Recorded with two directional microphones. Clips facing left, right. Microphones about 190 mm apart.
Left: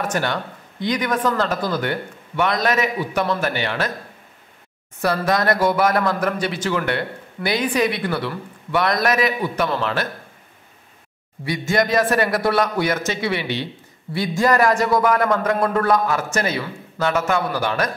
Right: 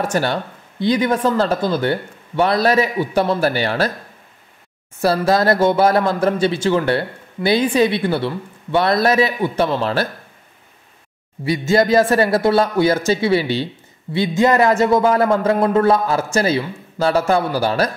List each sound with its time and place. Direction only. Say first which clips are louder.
0.0 s speech: right 4 dB; 30° right (ahead or behind)
5.0 s a man's voice: right 4 dB; 30° right (ahead or behind)
11.4 s a man's voice: right 5 dB; 25° right (ahead or behind)